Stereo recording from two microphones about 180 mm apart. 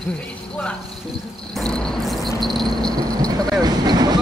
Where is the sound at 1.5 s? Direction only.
5° left (ahead or behind).